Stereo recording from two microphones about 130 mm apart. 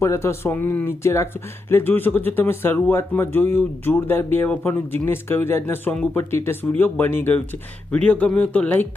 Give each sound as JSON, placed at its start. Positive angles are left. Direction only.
{"t": 0.0, "sound": "speech", "side_deg": 20}